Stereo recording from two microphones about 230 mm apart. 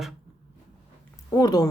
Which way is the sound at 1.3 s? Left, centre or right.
Centre.